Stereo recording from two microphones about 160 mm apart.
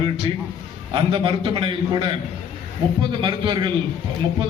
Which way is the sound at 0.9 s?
35° right (ahead or behind).